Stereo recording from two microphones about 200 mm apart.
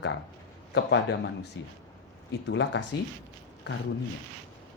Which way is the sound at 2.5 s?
65° left (ahead or behind).